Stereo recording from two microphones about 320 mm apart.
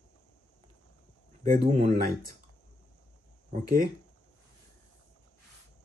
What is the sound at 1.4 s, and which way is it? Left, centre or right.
Speech, right.